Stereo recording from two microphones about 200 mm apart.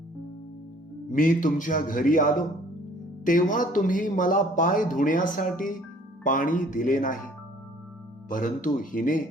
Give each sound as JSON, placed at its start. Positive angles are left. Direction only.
{"t": 1.1, "sound": "a man's voice", "side_deg": 40}
{"t": 8.3, "sound": "a man's voice", "side_deg": 40}